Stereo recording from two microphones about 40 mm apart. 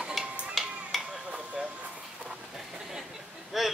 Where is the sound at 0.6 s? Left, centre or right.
Centre.